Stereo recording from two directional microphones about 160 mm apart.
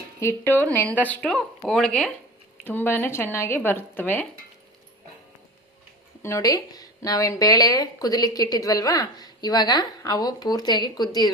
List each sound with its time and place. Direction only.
0.2 s speech: 15° left (ahead or behind)
2.6 s speech: 15° left (ahead or behind)
6.2 s speech: 20° left (ahead or behind)